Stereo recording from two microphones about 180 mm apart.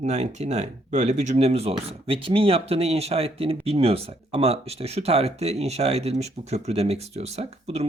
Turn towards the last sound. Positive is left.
turn(degrees=-35)  # may be behind; listen again after turning